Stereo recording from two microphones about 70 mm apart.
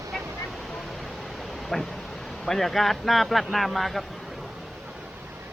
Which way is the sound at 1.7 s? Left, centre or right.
Centre.